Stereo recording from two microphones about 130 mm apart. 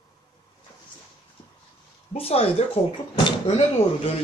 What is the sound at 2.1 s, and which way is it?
Speech, 50° left (ahead or behind).